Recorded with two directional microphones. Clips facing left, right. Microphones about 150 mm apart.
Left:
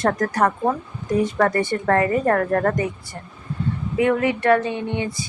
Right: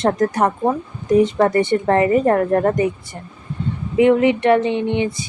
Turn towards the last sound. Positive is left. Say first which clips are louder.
# right 6 dB
turn(degrees=-20)  # may be behind; listen again after turning